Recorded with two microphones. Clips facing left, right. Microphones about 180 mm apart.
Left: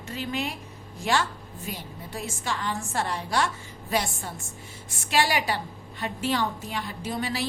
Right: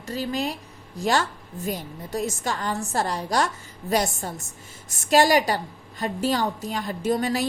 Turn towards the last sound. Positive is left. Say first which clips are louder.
# right 6 dB
turn(degrees=-45)  # may be behind; listen again after turning